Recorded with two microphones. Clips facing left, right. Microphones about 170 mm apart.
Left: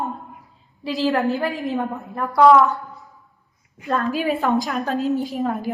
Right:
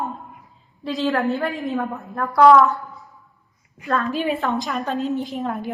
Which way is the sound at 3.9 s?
5° left (ahead or behind).